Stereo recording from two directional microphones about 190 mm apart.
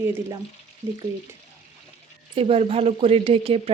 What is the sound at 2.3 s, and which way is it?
Speech, 30° right (ahead or behind).